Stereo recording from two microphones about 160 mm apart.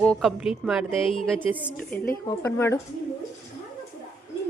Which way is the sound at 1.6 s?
10° left (ahead or behind).